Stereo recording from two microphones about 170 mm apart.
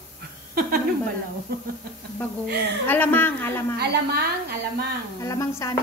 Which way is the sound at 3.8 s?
70° right (ahead or behind).